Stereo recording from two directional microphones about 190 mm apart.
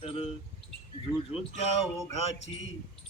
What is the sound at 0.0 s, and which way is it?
Speech, 30° left (ahead or behind).